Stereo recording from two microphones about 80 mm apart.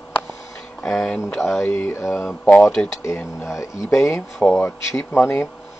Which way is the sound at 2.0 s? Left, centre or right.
Centre.